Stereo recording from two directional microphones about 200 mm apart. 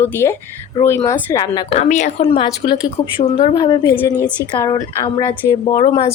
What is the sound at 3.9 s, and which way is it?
A woman's voice, 10° left (ahead or behind).